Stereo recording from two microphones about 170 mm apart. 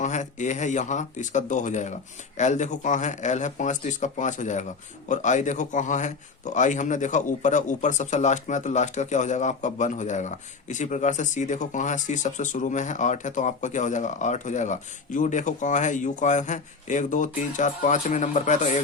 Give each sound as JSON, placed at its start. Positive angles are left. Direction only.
{"t": 0.0, "sound": "speech", "side_deg": 45}